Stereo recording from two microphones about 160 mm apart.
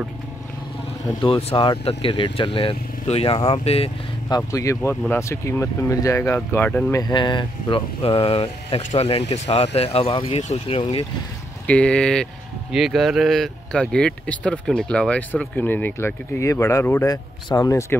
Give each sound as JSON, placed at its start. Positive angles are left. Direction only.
{"t": 1.2, "sound": "speech", "side_deg": 35}
{"t": 4.4, "sound": "speech", "side_deg": 20}
{"t": 6.9, "sound": "speech", "side_deg": 25}
{"t": 11.6, "sound": "speech", "side_deg": 5}